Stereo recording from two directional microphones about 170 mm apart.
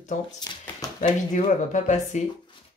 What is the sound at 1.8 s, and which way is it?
Speech, 45° left (ahead or behind).